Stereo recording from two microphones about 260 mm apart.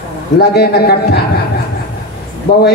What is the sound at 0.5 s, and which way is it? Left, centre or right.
Speech, left.